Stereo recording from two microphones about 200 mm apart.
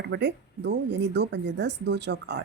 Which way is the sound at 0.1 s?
60° right (ahead or behind).